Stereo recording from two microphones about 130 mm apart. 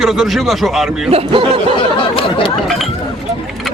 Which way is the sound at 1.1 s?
45° right (ahead or behind).